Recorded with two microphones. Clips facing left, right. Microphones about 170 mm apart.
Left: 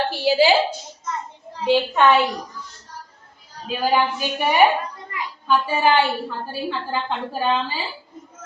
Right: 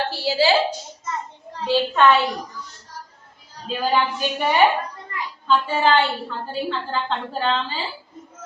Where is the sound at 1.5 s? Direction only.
15° left (ahead or behind).